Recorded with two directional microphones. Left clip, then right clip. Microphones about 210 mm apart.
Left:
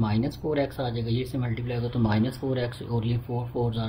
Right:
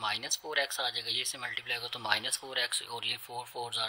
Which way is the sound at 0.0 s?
45° right (ahead or behind).